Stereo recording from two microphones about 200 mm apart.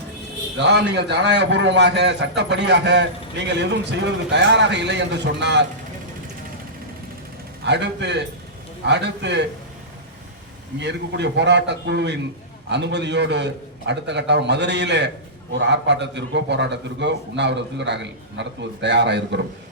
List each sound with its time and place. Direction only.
0.6 s a man's voice: 60° right (ahead or behind)
7.6 s a man's voice: 60° right (ahead or behind)
10.8 s a man's voice: 60° right (ahead or behind)